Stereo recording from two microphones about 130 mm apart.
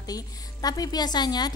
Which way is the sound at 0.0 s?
30° left (ahead or behind).